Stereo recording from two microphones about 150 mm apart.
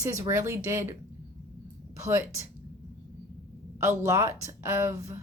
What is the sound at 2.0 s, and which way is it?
Speech, 20° right (ahead or behind).